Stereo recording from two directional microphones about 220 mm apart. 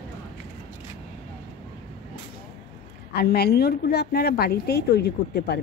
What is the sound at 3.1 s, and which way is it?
A woman's voice, 45° left (ahead or behind).